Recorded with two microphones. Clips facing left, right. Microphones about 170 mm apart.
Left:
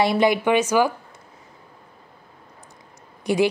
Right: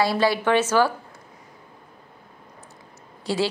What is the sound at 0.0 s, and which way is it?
Speech, 20° left (ahead or behind).